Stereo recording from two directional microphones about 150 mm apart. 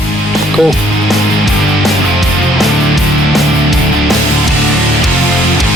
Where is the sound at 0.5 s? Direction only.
Centre (ahead or behind).